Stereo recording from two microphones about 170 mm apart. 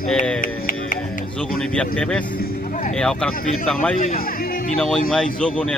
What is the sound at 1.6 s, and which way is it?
Speech, 5° left (ahead or behind).